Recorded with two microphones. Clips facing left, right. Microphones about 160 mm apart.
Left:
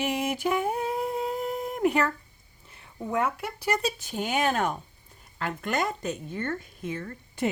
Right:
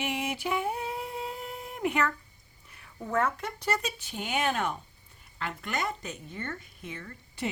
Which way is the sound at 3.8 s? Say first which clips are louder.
Left 6 dB; 40° left (ahead or behind).